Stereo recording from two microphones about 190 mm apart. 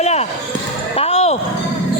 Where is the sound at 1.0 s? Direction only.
35° left (ahead or behind).